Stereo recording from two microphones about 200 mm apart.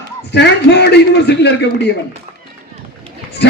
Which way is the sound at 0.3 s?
60° left (ahead or behind).